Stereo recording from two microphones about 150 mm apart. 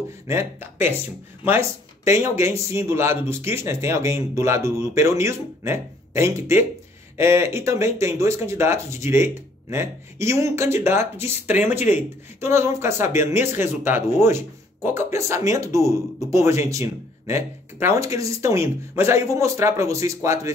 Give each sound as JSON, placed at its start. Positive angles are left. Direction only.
{"t": 0.3, "sound": "speech", "side_deg": -15}